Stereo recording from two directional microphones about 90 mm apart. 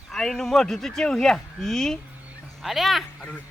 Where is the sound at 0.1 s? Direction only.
5° left (ahead or behind).